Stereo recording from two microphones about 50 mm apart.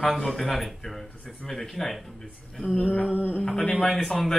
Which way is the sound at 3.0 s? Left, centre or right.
Right.